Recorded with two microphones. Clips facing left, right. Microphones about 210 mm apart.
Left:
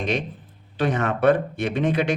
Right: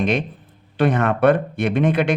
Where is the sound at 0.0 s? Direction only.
55° right (ahead or behind).